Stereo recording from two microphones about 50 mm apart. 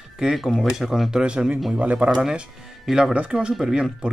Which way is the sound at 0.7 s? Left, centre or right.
Centre.